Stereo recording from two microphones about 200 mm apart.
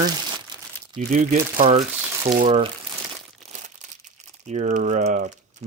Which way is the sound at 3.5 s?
35° right (ahead or behind).